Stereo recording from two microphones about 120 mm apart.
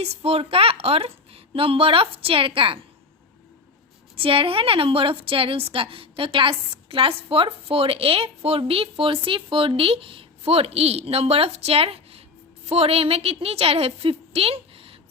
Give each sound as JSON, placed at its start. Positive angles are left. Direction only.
{"t": 0.0, "sound": "a woman's voice", "side_deg": -55}
{"t": 4.1, "sound": "a woman's voice", "side_deg": -50}